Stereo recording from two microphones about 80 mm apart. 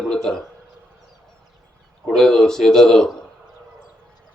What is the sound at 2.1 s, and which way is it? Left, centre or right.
A man's voice, centre.